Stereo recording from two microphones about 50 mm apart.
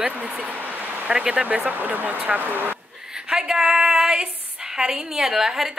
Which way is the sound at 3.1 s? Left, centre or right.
Centre.